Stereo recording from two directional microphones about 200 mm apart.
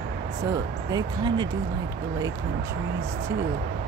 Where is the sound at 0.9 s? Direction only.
20° right (ahead or behind).